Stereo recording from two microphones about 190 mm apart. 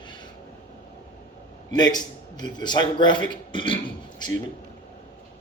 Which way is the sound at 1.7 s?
20° left (ahead or behind).